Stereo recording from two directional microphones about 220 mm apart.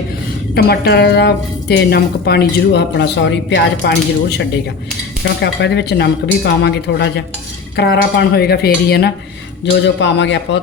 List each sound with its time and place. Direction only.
0.5 s a woman's voice: 45° left (ahead or behind)